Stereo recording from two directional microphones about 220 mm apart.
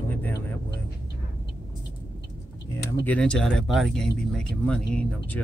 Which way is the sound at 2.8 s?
5° left (ahead or behind).